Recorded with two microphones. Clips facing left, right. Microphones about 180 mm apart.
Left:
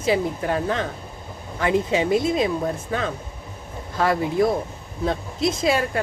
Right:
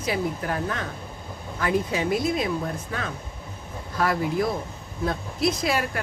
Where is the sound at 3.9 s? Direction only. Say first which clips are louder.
Left 3 dB; 25° left (ahead or behind).